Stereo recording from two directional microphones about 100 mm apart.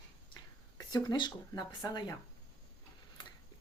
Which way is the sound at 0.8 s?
45° left (ahead or behind).